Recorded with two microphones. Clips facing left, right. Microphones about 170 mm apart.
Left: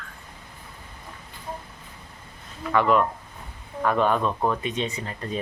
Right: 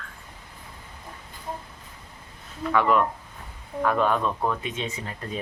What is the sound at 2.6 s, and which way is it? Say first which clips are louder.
Speech: left 1 dB; centre (ahead or behind).